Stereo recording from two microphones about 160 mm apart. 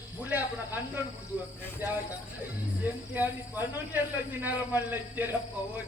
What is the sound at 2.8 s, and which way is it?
Speech, 10° right (ahead or behind).